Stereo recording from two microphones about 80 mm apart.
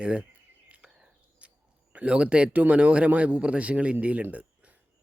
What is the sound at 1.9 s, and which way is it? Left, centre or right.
Speech, centre.